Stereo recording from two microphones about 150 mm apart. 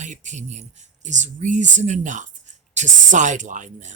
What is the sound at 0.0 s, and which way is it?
Speech, 55° right (ahead or behind).